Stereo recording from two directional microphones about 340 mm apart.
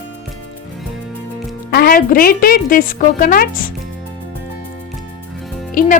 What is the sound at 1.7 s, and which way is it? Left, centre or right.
Speech, left.